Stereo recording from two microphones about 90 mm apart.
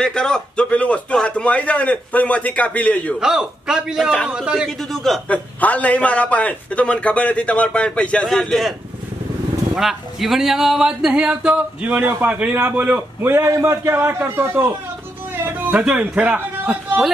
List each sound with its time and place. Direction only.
0.0 s a man's voice: 10° left (ahead or behind)
3.2 s speech: 5° right (ahead or behind)
4.6 s a man's voice: 5° left (ahead or behind)
5.3 s a man's voice: 15° left (ahead or behind)
9.8 s a man's voice: centre (ahead or behind); by 14.7 s 25° right (ahead or behind)
15.4 s a sound: 20° right (ahead or behind)
15.8 s speech: 15° right (ahead or behind)